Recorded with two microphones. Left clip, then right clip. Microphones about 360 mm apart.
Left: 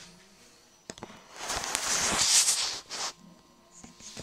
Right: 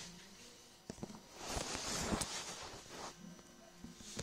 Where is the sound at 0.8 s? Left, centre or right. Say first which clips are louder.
Left 7 dB; left.